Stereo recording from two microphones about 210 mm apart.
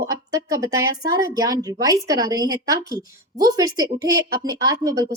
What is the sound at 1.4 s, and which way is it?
A woman's voice, 15° right (ahead or behind).